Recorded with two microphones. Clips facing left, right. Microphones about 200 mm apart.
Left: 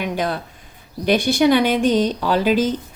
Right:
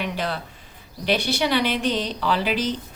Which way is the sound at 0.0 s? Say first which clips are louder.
Left 4 dB; 45° left (ahead or behind).